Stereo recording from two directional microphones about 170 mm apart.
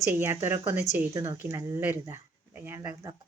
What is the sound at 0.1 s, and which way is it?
A woman's voice, 15° right (ahead or behind).